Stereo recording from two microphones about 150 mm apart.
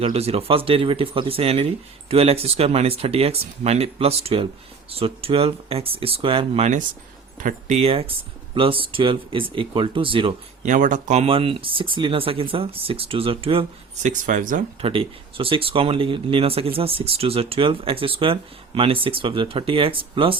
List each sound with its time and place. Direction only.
0.0 s speech: 40° right (ahead or behind)
7.3 s speech: 65° right (ahead or behind)
7.8 s speech: 40° right (ahead or behind)
10.6 s speech: 55° right (ahead or behind); by 14.1 s 40° right (ahead or behind)
14.1 s speech: 60° right (ahead or behind)
14.8 s speech: 40° right (ahead or behind)